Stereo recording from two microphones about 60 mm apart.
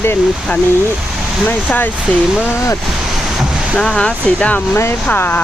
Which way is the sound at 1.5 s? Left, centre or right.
Left.